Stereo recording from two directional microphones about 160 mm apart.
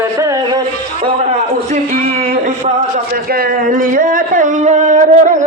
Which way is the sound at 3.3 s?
65° right (ahead or behind).